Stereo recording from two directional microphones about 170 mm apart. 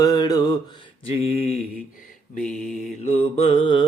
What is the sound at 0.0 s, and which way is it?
Mantra, 20° left (ahead or behind).